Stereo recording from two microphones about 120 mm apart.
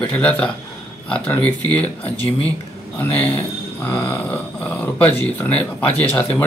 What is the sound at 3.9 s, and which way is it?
Speech, 15° left (ahead or behind).